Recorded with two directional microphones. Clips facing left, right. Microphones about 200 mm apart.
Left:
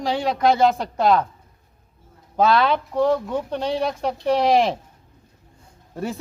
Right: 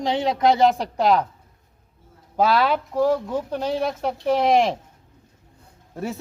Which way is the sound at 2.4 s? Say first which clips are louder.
Left 1 dB; 10° right (ahead or behind).